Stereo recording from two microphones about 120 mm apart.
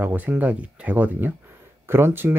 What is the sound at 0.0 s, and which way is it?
Speech, 15° right (ahead or behind).